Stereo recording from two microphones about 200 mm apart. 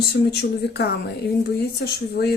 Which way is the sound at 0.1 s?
55° left (ahead or behind).